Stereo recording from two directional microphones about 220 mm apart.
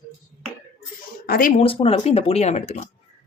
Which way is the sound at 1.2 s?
40° left (ahead or behind).